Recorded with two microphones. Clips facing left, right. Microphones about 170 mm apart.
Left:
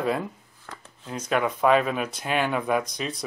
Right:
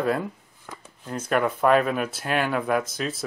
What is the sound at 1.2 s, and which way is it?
Speech, 5° right (ahead or behind).